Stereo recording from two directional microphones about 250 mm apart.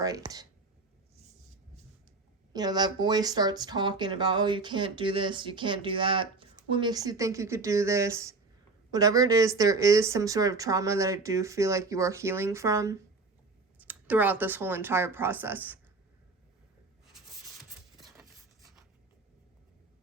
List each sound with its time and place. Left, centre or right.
0.0 s speech: centre
2.5 s speech: centre
18.0 s a sound: centre